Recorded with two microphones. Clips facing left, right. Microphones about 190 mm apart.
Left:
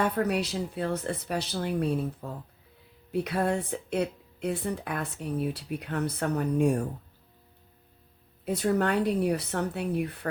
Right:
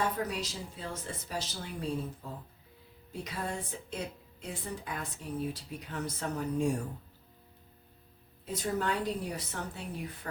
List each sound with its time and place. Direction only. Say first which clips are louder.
0.0 s speech: left 6 dB; 65° left (ahead or behind)
8.4 s speech: left 7 dB; 65° left (ahead or behind)